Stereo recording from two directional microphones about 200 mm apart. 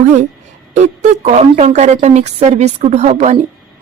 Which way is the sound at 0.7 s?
35° right (ahead or behind).